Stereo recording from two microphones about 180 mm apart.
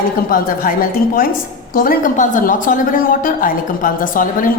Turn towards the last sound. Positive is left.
turn(degrees=50)  # may be behind; listen again after turning